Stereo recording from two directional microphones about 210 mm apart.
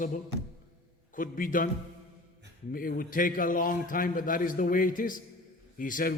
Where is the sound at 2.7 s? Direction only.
40° left (ahead or behind).